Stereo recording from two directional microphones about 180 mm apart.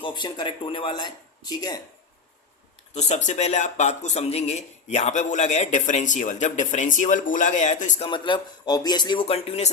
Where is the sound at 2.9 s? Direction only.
40° left (ahead or behind).